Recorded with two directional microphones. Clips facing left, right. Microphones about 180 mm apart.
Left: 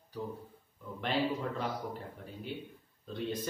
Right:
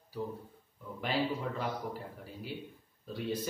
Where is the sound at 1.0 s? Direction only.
5° right (ahead or behind).